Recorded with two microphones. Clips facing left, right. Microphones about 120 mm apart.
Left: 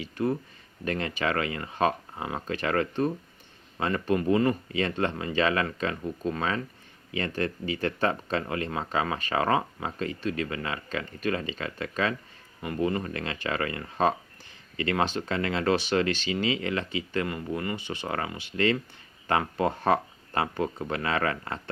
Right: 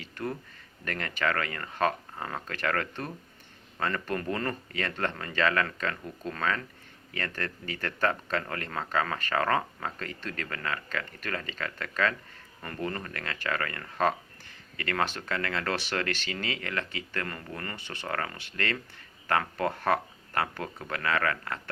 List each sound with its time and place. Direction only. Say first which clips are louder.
0.0 s speech: left 7 dB; 15° left (ahead or behind)